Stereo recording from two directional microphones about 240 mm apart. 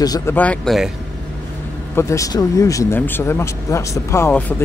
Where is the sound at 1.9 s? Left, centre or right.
Centre.